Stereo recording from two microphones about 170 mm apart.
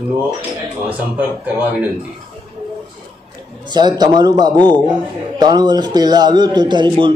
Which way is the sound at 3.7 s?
25° right (ahead or behind).